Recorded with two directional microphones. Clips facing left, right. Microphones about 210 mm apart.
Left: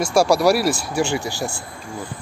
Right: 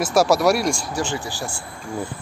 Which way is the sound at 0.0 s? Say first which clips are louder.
Left 1 dB; centre (ahead or behind).